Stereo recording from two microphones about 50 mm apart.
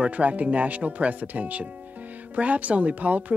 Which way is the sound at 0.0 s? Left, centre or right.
Right.